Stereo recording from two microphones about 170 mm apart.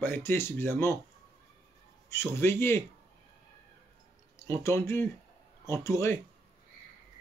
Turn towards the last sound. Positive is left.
turn(degrees=15)  # may be behind; listen again after turning